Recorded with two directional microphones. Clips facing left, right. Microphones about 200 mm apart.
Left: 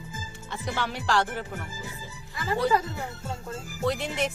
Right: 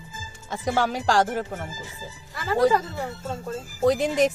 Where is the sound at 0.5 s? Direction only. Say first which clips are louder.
Right 7 dB; 45° right (ahead or behind).